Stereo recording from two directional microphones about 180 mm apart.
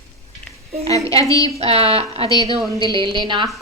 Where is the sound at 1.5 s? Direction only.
35° right (ahead or behind).